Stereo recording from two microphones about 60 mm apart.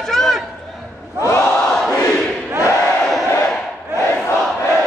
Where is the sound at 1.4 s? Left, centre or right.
Centre.